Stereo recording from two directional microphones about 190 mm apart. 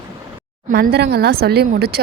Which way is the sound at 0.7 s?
55° right (ahead or behind).